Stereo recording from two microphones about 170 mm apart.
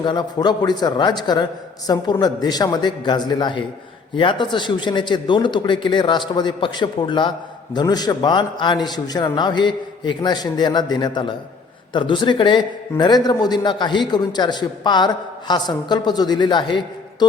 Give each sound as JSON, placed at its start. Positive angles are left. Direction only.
{"t": 0.0, "sound": "speech", "side_deg": 25}